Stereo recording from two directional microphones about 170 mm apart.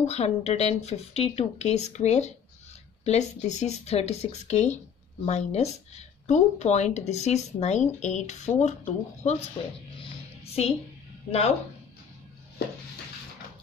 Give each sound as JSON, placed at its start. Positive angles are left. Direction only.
{"t": 0.0, "sound": "speech", "side_deg": 40}
{"t": 10.4, "sound": "music", "side_deg": 35}